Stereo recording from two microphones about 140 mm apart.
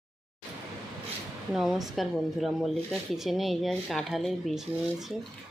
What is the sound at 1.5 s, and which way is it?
Speech, 5° right (ahead or behind).